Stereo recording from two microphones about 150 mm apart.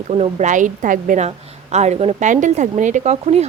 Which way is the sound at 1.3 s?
50° right (ahead or behind).